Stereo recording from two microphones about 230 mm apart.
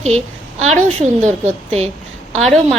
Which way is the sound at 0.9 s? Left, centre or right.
Right.